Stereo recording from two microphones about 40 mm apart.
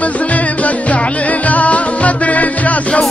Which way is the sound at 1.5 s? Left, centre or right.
Left.